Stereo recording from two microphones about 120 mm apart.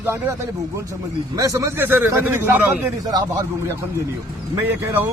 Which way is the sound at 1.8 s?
15° right (ahead or behind).